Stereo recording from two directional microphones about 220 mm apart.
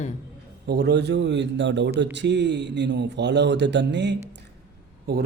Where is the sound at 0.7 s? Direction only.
50° right (ahead or behind).